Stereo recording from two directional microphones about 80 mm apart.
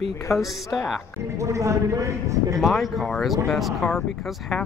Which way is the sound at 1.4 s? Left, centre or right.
Right.